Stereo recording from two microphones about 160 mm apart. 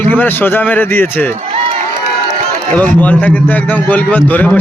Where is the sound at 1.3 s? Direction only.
45° right (ahead or behind).